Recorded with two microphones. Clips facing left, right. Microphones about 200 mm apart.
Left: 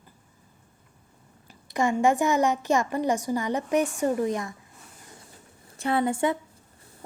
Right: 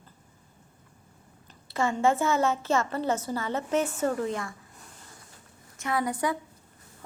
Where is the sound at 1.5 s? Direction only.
15° left (ahead or behind).